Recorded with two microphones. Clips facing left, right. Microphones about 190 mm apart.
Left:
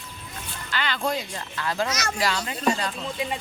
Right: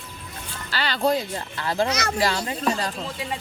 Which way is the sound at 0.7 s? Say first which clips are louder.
Right 4 dB; 35° right (ahead or behind).